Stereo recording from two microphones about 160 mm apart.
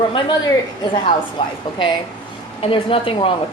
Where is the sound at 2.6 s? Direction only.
35° left (ahead or behind).